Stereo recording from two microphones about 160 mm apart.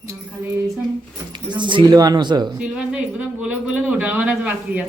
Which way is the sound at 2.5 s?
5° right (ahead or behind).